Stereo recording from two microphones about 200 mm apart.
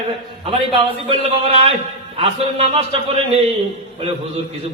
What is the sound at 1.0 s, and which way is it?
Speech, 30° right (ahead or behind).